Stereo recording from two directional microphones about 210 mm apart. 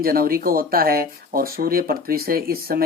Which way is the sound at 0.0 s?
45° right (ahead or behind).